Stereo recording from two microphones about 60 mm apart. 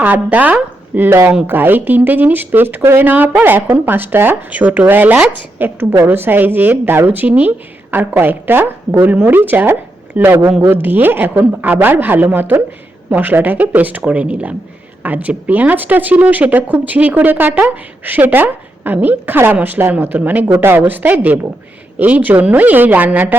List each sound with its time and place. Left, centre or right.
0.0 s a woman's voice: right
4.5 s a woman's voice: right
5.8 s a woman's voice: right
20.5 s a woman's voice: right